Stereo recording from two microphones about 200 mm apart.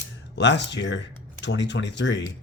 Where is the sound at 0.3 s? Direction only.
60° left (ahead or behind).